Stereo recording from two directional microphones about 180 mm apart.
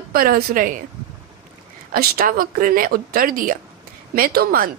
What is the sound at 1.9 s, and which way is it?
A woman's voice, 55° right (ahead or behind).